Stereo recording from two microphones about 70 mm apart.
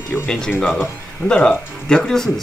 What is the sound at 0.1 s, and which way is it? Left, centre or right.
Speech, centre.